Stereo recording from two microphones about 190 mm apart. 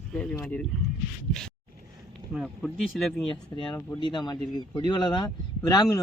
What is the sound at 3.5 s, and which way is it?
Speech, 15° left (ahead or behind).